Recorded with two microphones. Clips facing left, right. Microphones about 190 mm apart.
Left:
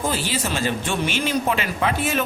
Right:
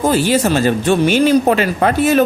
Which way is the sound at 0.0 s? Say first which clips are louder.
Right 11 dB; 45° right (ahead or behind).